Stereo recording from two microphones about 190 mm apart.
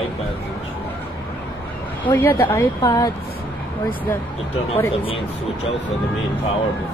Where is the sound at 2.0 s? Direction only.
10° left (ahead or behind).